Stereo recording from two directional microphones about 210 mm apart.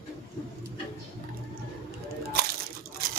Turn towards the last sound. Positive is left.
turn(degrees=-45)  # may be behind; listen again after turning